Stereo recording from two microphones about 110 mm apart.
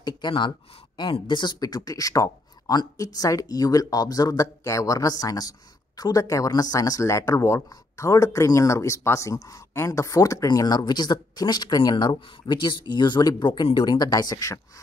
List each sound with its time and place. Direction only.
0.0 s speech: 45° left (ahead or behind)